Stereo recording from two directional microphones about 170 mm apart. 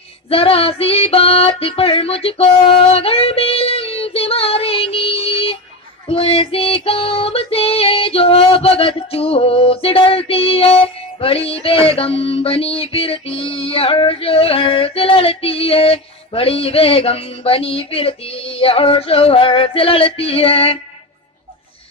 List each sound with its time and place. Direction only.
0.3 s music: 35° left (ahead or behind)
6.0 s child singing: 35° left (ahead or behind)
11.9 s a sound: 35° left (ahead or behind)